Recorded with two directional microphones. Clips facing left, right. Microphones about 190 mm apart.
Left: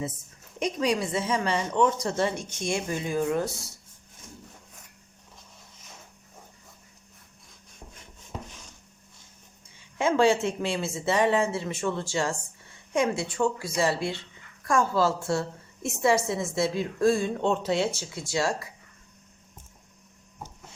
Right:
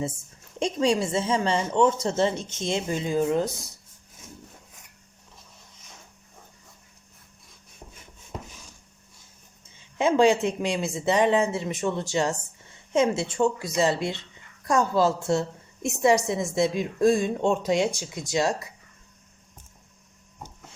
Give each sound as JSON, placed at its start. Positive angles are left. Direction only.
{"t": 0.6, "sound": "a woman's voice", "side_deg": -30}
{"t": 10.0, "sound": "a woman's voice", "side_deg": -15}